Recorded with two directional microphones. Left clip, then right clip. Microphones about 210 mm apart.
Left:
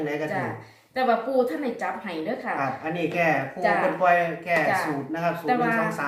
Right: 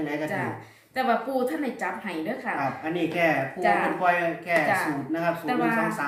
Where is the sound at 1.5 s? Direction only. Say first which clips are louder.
Left 1 dB; 5° right (ahead or behind).